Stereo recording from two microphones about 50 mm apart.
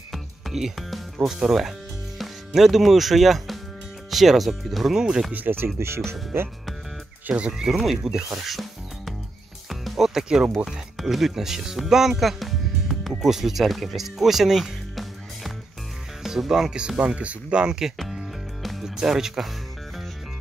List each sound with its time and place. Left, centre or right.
0.1 s music: centre
1.2 s speech: centre
5.3 s speech: right
5.8 s speech: right
7.2 s speech: right
7.5 s speech: centre
9.7 s music: centre
10.6 s speech: centre
16.7 s speech: centre
18.6 s music: centre
18.9 s speech: centre